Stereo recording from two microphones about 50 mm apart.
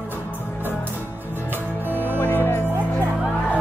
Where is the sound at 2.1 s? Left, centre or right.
Left.